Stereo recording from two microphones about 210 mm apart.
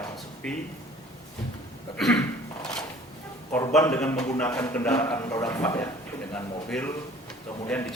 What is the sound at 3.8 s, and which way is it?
A man's voice, 10° left (ahead or behind).